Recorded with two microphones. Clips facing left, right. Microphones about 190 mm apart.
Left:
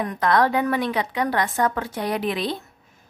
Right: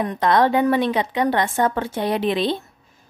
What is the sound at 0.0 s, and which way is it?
A woman's voice, 25° right (ahead or behind).